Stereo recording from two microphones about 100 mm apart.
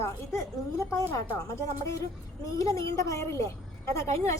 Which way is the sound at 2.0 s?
35° left (ahead or behind).